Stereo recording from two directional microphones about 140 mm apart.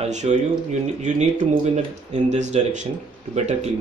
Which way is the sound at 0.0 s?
55° right (ahead or behind).